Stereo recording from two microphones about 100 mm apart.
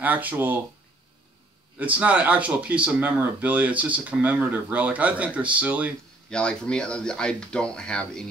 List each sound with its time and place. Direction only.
0.0 s speech: 15° right (ahead or behind)
1.8 s speech: 15° right (ahead or behind)
6.3 s speech: 10° left (ahead or behind)